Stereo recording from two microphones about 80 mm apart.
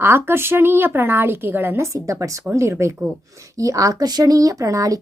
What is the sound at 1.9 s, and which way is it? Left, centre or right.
Speech, right.